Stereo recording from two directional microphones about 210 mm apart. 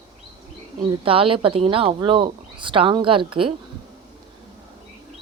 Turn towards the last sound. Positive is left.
turn(degrees=-25)  # may be behind; listen again after turning